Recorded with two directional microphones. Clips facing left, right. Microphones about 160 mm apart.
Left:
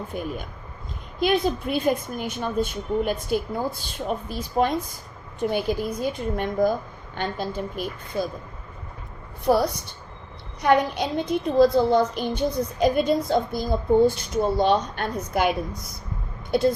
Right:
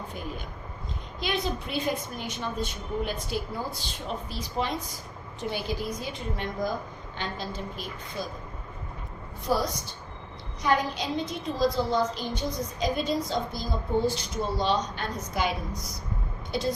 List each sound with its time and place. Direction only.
0.1 s a woman's voice: 50° left (ahead or behind)
9.5 s a woman's voice: 60° left (ahead or behind)